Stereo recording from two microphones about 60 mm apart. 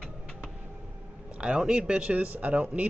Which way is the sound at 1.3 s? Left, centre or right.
Centre.